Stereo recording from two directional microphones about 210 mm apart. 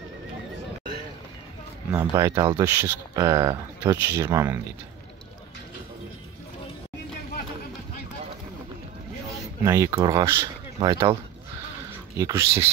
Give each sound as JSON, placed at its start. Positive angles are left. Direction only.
{"t": 1.9, "sound": "speech", "side_deg": -15}
{"t": 9.6, "sound": "speech", "side_deg": -15}
{"t": 12.2, "sound": "speech", "side_deg": -15}